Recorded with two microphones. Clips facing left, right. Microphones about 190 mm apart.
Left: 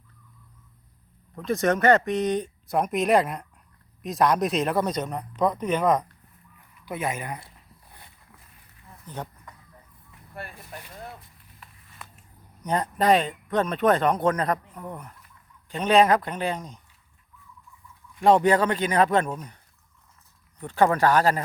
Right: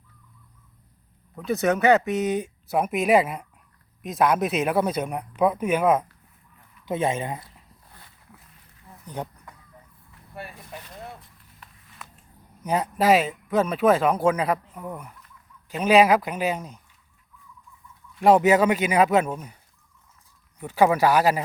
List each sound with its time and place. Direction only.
1.4 s speech: 5° right (ahead or behind)
6.8 s speech: 25° right (ahead or behind)
9.0 s speech: 10° right (ahead or behind)
10.3 s a sound: 5° right (ahead or behind)
12.6 s speech: 5° right (ahead or behind)
18.2 s speech: 5° right (ahead or behind)
20.6 s speech: 10° right (ahead or behind)